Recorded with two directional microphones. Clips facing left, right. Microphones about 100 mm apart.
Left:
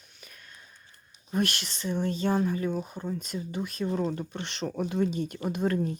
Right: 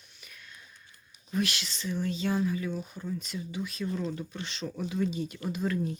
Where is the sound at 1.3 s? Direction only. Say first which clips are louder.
Left 2 dB; 50° left (ahead or behind).